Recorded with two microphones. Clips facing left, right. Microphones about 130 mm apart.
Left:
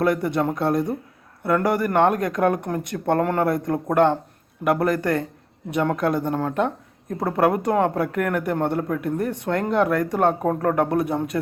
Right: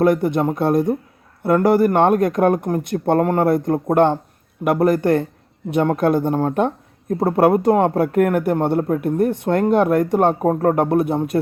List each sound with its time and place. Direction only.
0.0 s speech: 25° right (ahead or behind)